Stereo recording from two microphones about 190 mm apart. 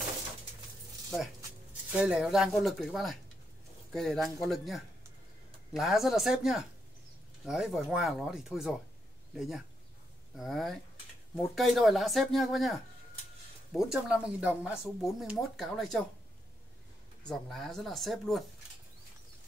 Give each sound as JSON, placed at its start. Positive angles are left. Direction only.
{"t": 1.9, "sound": "speech", "side_deg": -5}
{"t": 13.8, "sound": "speech", "side_deg": -5}
{"t": 17.2, "sound": "speech", "side_deg": 5}